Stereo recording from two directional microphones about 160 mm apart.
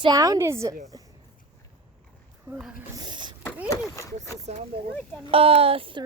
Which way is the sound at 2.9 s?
25° right (ahead or behind).